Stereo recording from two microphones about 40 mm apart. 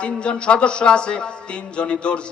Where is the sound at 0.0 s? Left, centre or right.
Left.